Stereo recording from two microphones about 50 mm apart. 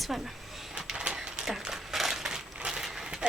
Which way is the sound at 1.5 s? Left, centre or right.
Centre.